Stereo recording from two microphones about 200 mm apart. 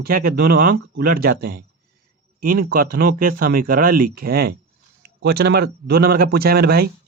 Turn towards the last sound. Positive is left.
turn(degrees=-50)  # may be behind; listen again after turning